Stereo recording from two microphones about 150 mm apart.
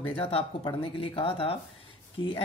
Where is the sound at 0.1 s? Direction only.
35° left (ahead or behind).